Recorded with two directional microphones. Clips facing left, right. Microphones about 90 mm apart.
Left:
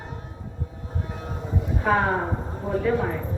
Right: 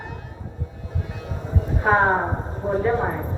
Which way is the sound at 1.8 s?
30° right (ahead or behind).